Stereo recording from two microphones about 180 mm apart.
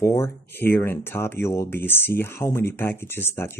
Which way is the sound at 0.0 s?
15° left (ahead or behind).